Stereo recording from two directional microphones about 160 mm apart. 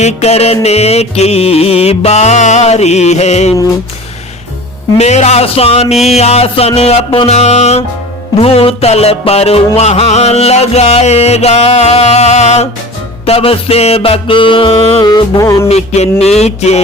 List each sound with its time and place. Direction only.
0.0 s music: 40° left (ahead or behind)
4.9 s music: 45° left (ahead or behind); by 15.6 s 20° left (ahead or behind)
15.7 s a sound: 40° left (ahead or behind)